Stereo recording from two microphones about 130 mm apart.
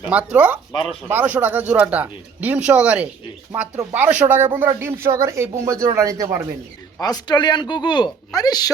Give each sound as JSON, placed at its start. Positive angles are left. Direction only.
{"t": 0.1, "sound": "speech", "side_deg": -10}
{"t": 7.0, "sound": "speech", "side_deg": 30}